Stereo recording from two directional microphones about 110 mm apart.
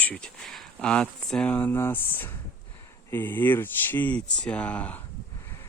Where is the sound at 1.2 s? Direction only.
5° left (ahead or behind).